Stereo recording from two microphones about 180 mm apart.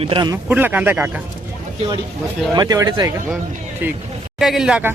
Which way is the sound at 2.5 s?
20° right (ahead or behind).